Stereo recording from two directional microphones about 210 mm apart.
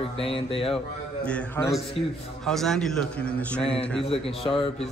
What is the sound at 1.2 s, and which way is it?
A man's voice, 10° left (ahead or behind).